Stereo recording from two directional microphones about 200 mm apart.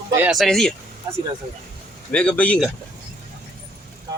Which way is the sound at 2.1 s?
5° left (ahead or behind).